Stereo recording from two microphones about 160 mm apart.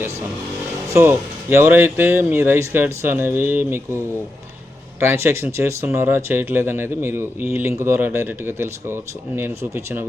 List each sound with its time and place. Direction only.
0.9 s a man's voice: 15° right (ahead or behind)